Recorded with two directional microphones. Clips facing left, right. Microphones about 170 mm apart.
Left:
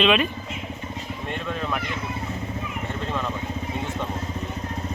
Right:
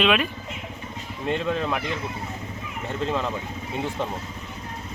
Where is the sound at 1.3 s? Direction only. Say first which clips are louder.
Right 5 dB; 20° right (ahead or behind).